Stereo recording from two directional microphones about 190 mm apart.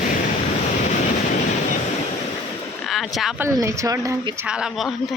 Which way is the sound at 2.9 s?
Centre (ahead or behind).